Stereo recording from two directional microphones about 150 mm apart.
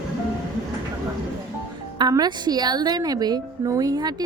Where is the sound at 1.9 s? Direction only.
25° right (ahead or behind).